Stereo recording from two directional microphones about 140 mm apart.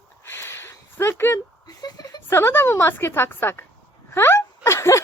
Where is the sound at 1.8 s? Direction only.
30° left (ahead or behind).